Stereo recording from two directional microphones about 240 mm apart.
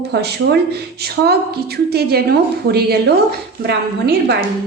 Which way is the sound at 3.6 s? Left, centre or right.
Right.